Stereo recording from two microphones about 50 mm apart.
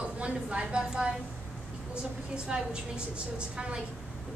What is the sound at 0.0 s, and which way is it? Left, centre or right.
A woman's voice, right.